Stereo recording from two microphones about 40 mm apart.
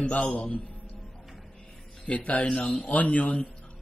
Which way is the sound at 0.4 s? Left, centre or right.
Left.